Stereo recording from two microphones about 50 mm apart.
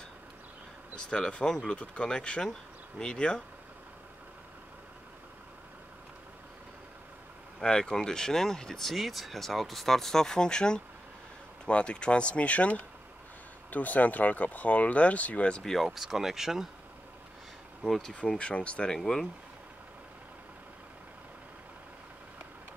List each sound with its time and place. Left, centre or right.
1.1 s speech: centre
7.6 s speech: centre
15.6 s speech: centre
15.9 s speech: centre
17.8 s speech: centre
18.4 s speech: left
18.9 s speech: centre